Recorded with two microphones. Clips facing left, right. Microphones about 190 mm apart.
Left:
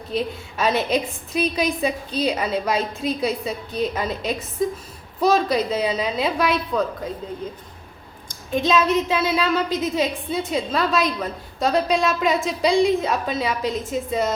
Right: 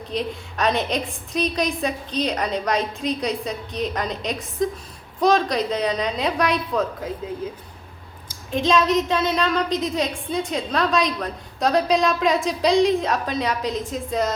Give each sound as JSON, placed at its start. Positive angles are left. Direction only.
{"t": 0.1, "sound": "a woman's voice", "side_deg": 5}
{"t": 8.3, "sound": "a woman's voice", "side_deg": 0}